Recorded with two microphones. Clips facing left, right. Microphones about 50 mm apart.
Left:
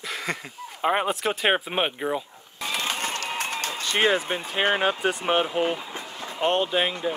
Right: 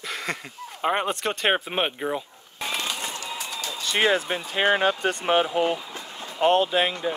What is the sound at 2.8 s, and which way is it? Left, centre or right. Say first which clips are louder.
Run: left 2 dB; left.